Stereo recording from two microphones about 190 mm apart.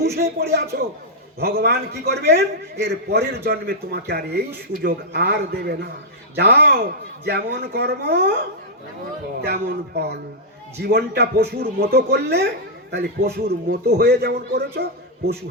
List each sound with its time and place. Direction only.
0.2 s a man's voice: 60° right (ahead or behind)
9.5 s a man's voice: 60° right (ahead or behind)